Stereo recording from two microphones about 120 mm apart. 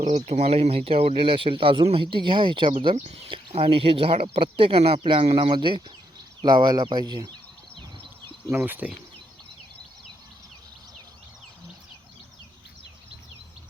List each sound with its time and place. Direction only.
0.0 s speech: 70° right (ahead or behind); by 7.3 s 35° right (ahead or behind)
8.4 s speech: 15° right (ahead or behind)